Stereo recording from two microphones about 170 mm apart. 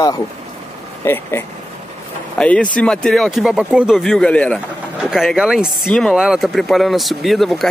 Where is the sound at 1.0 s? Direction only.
15° left (ahead or behind).